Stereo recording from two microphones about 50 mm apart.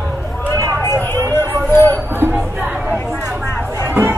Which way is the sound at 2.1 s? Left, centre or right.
Right.